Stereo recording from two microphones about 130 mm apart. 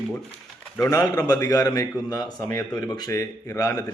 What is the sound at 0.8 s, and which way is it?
A man's voice, 25° left (ahead or behind).